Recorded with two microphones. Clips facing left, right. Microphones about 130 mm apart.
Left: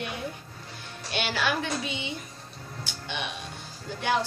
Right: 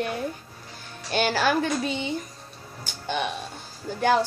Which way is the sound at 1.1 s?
40° right (ahead or behind).